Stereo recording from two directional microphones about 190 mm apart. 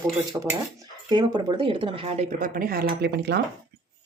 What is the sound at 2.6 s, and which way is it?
Speech, 50° right (ahead or behind).